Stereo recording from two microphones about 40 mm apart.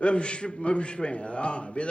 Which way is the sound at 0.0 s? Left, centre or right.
Left.